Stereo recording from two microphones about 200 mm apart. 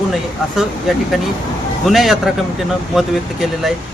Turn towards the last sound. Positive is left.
turn(degrees=0)  # may be behind; listen again after turning